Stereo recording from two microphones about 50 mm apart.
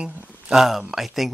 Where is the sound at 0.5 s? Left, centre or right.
Centre.